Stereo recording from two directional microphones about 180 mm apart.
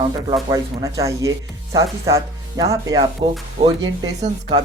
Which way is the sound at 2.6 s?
20° right (ahead or behind).